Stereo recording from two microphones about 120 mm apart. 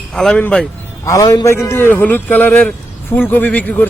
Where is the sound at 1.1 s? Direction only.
30° left (ahead or behind).